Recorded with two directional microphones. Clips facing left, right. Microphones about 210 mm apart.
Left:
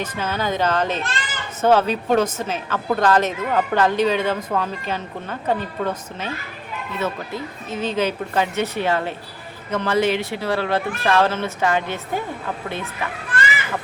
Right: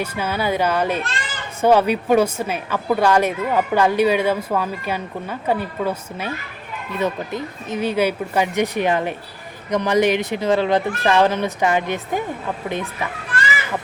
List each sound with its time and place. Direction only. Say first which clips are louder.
0.0 s a woman's voice: right 2 dB; 10° right (ahead or behind)